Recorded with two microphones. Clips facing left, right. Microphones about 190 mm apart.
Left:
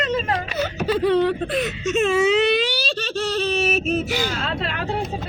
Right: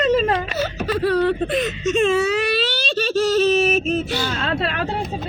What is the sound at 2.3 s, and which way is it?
Baby cry, 20° left (ahead or behind).